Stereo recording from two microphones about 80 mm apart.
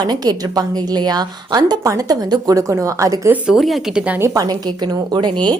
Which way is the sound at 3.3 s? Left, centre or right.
Centre.